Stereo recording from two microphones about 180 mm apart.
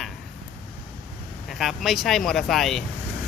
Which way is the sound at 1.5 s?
Centre (ahead or behind).